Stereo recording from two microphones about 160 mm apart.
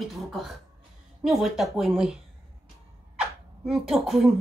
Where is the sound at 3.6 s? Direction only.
Centre (ahead or behind).